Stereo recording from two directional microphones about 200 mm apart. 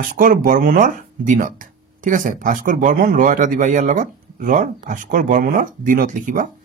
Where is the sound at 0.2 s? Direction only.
40° right (ahead or behind).